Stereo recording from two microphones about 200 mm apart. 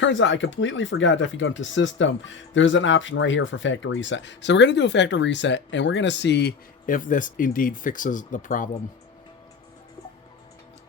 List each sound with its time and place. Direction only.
0.0 s speech: 70° left (ahead or behind); by 8.7 s 40° left (ahead or behind)